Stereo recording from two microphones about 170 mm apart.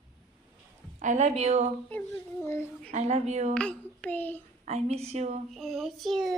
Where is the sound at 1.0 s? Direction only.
45° right (ahead or behind).